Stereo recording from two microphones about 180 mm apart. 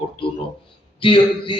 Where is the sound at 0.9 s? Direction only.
30° left (ahead or behind).